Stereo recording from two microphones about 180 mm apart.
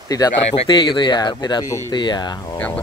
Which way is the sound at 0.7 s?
25° left (ahead or behind).